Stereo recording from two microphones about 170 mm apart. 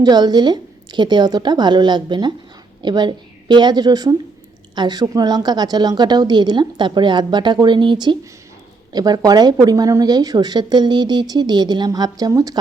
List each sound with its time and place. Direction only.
0.0 s speech: 25° right (ahead or behind)